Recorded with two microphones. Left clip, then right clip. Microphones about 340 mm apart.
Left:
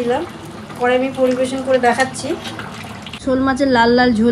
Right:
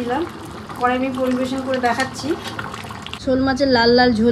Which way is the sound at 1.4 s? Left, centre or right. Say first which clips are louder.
Left 5 dB; centre.